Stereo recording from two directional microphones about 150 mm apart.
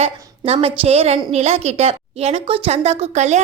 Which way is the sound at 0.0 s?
40° right (ahead or behind).